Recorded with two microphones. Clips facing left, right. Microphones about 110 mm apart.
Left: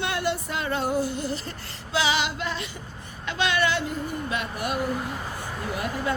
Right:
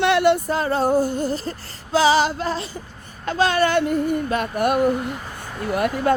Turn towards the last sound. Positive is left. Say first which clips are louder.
# right 8 dB
turn(degrees=-60)  # may be behind; listen again after turning